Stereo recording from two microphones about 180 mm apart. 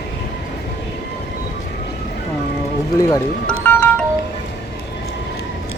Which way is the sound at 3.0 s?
20° left (ahead or behind).